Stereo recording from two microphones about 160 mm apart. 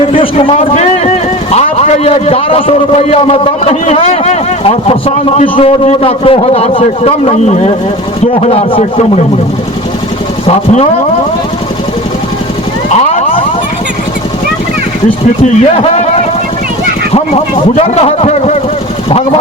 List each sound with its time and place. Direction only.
0.2 s a man's voice: 35° left (ahead or behind)
10.4 s speech: 40° left (ahead or behind)
12.9 s a sound: 45° left (ahead or behind)
15.4 s a man's voice: 40° left (ahead or behind)
17.2 s a man's voice: 40° left (ahead or behind)